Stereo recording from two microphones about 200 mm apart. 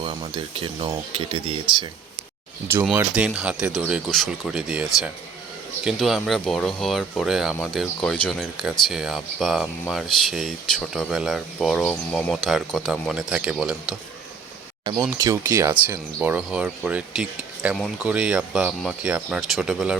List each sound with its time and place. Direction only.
0.0 s speech: 25° right (ahead or behind)
3.2 s speech: 5° right (ahead or behind)
14.8 s speech: 15° right (ahead or behind)